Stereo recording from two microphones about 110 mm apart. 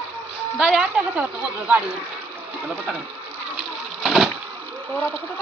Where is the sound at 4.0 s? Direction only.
Centre (ahead or behind).